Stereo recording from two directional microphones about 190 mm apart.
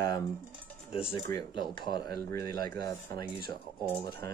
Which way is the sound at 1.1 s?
25° left (ahead or behind).